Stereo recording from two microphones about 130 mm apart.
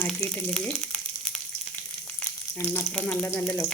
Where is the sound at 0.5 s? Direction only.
5° left (ahead or behind).